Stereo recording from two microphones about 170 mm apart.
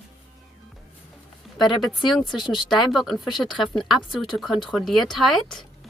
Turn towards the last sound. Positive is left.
turn(degrees=0)  # may be behind; listen again after turning